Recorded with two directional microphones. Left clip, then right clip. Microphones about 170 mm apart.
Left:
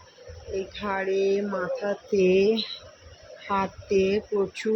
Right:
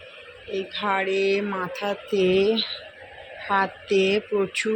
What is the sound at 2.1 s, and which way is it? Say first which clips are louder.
Speech: even; 10° left (ahead or behind).